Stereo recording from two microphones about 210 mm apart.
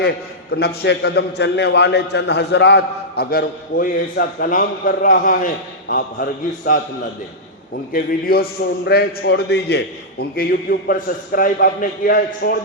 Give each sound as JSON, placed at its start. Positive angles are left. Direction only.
{"t": 0.5, "sound": "a man's voice", "side_deg": 50}
{"t": 7.9, "sound": "a man's voice", "side_deg": 45}